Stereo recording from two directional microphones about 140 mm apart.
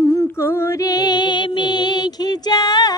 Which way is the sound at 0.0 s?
25° left (ahead or behind).